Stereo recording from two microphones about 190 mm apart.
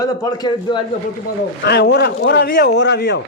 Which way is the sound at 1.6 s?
60° left (ahead or behind).